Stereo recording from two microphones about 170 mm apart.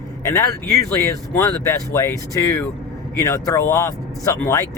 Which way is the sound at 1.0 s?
15° left (ahead or behind).